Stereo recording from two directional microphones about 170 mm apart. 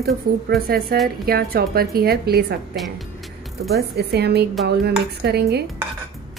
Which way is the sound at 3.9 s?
75° right (ahead or behind).